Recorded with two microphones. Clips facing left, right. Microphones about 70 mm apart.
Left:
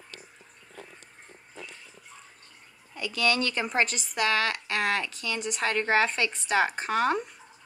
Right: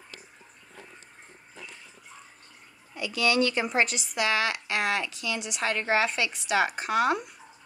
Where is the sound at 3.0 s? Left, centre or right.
Left.